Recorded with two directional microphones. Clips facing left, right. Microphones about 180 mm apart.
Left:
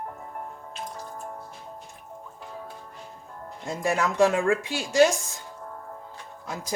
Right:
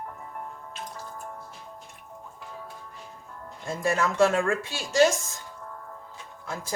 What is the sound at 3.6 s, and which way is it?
Speech, 15° left (ahead or behind).